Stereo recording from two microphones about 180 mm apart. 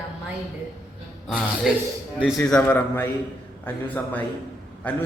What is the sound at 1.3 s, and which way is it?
A man's voice, centre (ahead or behind).